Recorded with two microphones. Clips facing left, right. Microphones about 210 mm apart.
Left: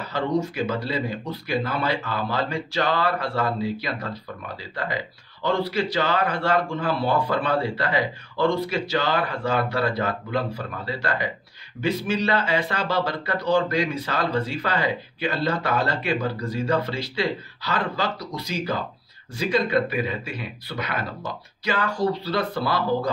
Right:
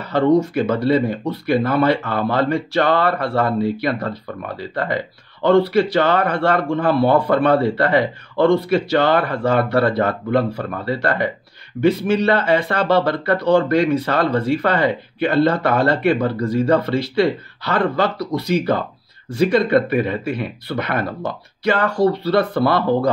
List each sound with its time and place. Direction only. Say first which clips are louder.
0.1 s speech: right 10 dB; 60° right (ahead or behind)